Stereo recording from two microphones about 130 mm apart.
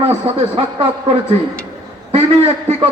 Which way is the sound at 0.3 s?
45° right (ahead or behind).